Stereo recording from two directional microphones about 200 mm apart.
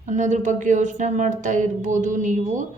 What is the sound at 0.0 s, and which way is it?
A woman's voice, 40° right (ahead or behind).